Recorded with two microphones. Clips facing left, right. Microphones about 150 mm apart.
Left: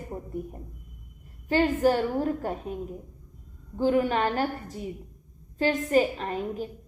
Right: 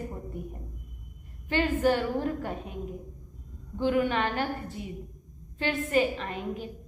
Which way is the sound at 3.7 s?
35° left (ahead or behind).